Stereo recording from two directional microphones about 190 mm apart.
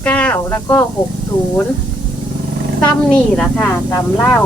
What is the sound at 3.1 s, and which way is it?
Speech, 10° left (ahead or behind).